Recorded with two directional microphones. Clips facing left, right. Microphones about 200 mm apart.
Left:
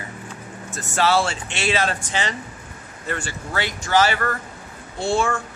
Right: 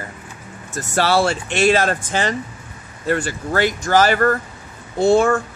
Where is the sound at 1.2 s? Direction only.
45° right (ahead or behind).